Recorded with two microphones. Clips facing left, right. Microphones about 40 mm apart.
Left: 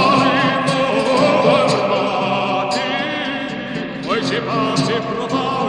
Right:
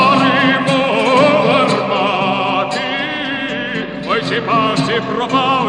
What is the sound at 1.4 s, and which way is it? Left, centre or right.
Music, right.